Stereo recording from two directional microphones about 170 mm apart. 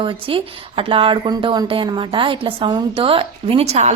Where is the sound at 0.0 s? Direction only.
30° right (ahead or behind).